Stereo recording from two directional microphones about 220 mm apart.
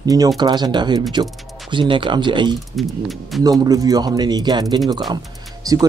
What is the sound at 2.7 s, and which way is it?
Speech, centre (ahead or behind).